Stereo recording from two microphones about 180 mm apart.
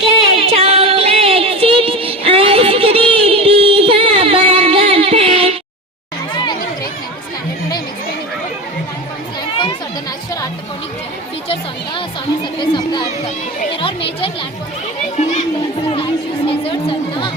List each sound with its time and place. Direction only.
0.3 s music: 35° right (ahead or behind)
6.3 s chatter: 25° left (ahead or behind)
12.5 s a sound: 25° left (ahead or behind)
16.5 s chatter: 30° left (ahead or behind)